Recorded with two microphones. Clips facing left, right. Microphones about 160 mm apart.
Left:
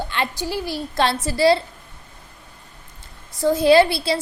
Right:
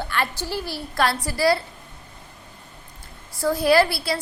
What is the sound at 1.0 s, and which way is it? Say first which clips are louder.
Speech: left 3 dB; 25° left (ahead or behind).